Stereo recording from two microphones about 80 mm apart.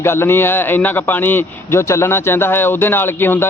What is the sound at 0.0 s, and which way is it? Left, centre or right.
A man's voice, left.